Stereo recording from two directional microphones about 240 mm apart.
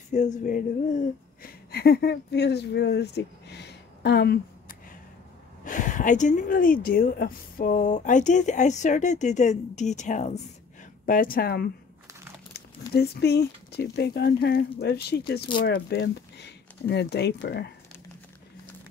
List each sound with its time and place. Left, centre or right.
0.1 s speech: left
12.9 s speech: left